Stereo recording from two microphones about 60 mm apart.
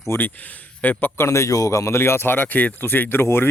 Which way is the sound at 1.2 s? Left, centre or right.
Left.